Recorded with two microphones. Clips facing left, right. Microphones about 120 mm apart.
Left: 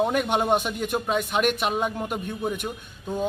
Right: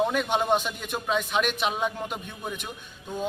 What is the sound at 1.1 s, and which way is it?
Speech, 50° left (ahead or behind).